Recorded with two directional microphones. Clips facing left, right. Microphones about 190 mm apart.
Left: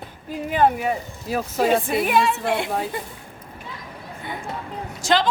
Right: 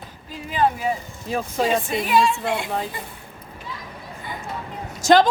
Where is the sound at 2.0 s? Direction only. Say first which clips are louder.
Even; 60° left (ahead or behind).